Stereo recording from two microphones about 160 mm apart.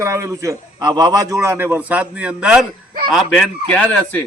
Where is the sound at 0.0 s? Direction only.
20° right (ahead or behind).